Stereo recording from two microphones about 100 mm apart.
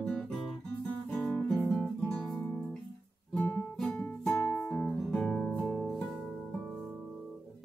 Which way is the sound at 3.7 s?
5° left (ahead or behind).